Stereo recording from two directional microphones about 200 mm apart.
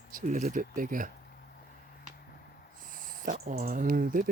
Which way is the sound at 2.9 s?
45° right (ahead or behind).